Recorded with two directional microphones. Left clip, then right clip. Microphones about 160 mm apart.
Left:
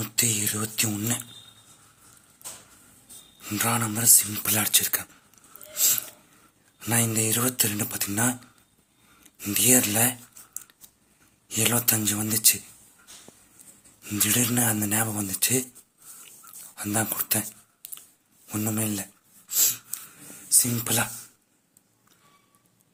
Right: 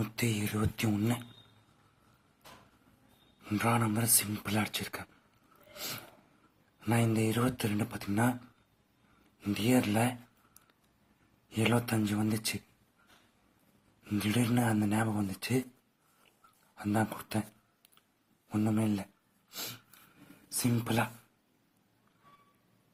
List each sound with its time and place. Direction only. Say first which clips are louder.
0.0 s speech: left 7 dB; 5° right (ahead or behind)
3.4 s speech: left 4 dB; centre (ahead or behind)
5.7 s a sound: left 14 dB; centre (ahead or behind)
6.7 s speech: left 4 dB; 5° left (ahead or behind)
9.4 s speech: left 6 dB; 5° left (ahead or behind)
14.0 s speech: left 7 dB; 5° left (ahead or behind)
16.7 s speech: left 4 dB; 10° left (ahead or behind)
18.4 s speech: left 2 dB; 10° left (ahead or behind)
19.5 s a sound: left 15 dB; 10° left (ahead or behind)
20.6 s speech: left 5 dB; 5° left (ahead or behind)